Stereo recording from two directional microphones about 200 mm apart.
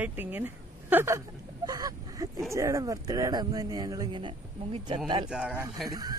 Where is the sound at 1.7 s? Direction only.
20° right (ahead or behind).